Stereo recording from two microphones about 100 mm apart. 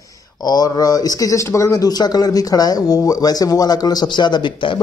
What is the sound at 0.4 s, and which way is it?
Speech, 40° left (ahead or behind).